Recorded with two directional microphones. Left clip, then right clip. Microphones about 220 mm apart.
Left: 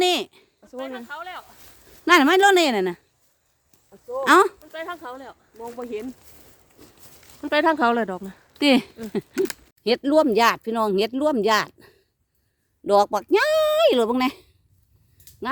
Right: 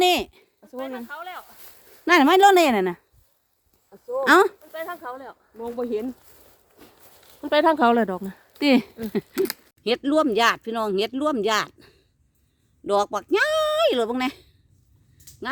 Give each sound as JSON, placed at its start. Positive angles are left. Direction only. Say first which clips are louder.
{"t": 0.0, "sound": "a sound", "louder": "right 1 dB", "side_deg": 0}
{"t": 1.0, "sound": "a sound", "louder": "left 1 dB", "side_deg": 50}
{"t": 2.0, "sound": "a woman's voice", "louder": "even", "side_deg": 5}
{"t": 4.2, "sound": "a woman's voice", "louder": "left 1 dB", "side_deg": 0}
{"t": 4.7, "sound": "speech", "louder": "even", "side_deg": 35}
{"t": 5.8, "sound": "speech", "louder": "right 5 dB", "side_deg": -15}
{"t": 7.4, "sound": "a woman's voice", "louder": "right 1 dB", "side_deg": 5}
{"t": 8.5, "sound": "speech", "louder": "left 1 dB", "side_deg": 10}